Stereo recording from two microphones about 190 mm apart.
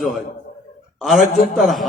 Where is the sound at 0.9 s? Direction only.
Centre (ahead or behind).